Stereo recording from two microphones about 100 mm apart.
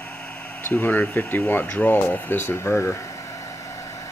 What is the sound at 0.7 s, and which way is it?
Speech, 15° left (ahead or behind).